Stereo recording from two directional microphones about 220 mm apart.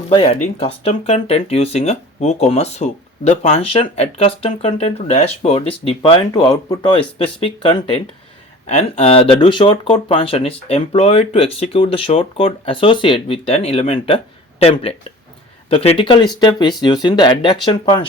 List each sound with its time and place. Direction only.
0.4 s speech: 25° left (ahead or behind)